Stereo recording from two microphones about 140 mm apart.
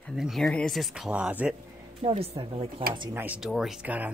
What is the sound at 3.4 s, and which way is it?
Speech, centre (ahead or behind).